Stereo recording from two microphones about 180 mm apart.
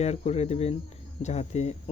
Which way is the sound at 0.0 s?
35° left (ahead or behind).